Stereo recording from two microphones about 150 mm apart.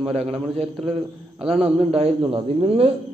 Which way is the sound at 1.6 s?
40° right (ahead or behind).